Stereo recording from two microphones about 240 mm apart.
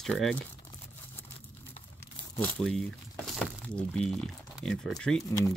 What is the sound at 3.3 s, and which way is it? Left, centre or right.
Speech, centre.